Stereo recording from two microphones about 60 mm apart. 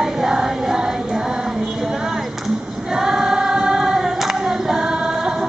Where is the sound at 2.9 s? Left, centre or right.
Centre.